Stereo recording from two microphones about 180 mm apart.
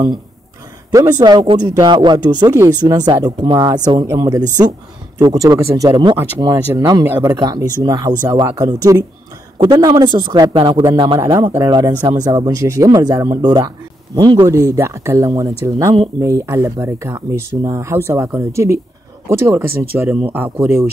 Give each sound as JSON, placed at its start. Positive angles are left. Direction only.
{"t": 1.2, "sound": "speech", "side_deg": -25}